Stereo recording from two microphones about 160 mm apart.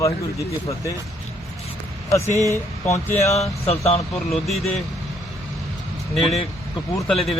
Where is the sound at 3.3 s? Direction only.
40° left (ahead or behind).